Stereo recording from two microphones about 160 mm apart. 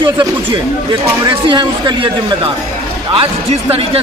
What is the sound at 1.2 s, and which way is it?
A man's voice, 30° right (ahead or behind).